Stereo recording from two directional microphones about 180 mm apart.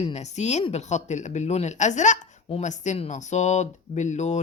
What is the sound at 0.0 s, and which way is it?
Speech, 40° left (ahead or behind).